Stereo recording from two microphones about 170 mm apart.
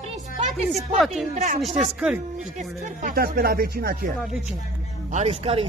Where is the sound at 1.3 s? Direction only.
40° right (ahead or behind).